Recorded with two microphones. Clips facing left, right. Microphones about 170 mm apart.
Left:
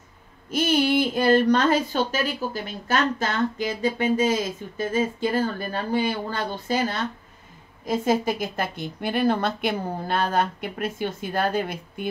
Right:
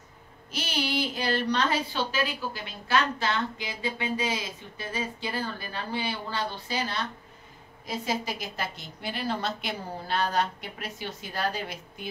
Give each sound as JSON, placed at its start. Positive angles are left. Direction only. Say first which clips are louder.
{"t": 0.5, "sound": "a woman's voice", "louder": "left 10 dB", "side_deg": 50}